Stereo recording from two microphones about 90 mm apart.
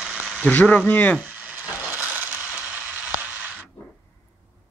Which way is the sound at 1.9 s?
20° right (ahead or behind).